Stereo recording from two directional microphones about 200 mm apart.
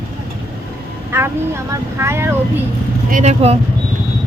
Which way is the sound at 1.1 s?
10° right (ahead or behind).